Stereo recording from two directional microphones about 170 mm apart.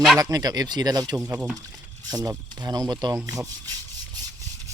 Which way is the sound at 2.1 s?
20° right (ahead or behind).